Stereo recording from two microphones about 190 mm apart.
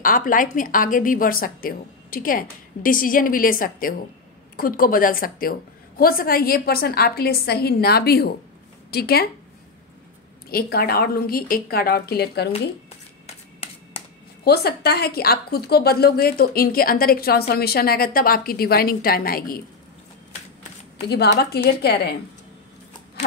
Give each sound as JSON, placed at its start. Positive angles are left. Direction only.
{"t": 0.0, "sound": "a woman's voice", "side_deg": 45}
{"t": 10.5, "sound": "a woman's voice", "side_deg": 55}
{"t": 13.3, "sound": "a sound", "side_deg": 30}
{"t": 14.4, "sound": "a woman's voice", "side_deg": 55}
{"t": 21.1, "sound": "a woman's voice", "side_deg": 60}